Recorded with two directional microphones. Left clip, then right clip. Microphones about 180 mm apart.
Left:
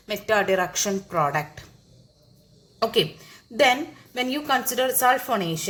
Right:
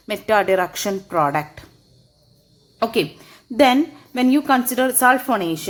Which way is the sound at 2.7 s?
45° right (ahead or behind).